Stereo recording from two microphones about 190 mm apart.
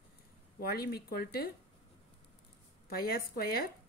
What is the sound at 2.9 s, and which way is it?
Speech, 50° left (ahead or behind).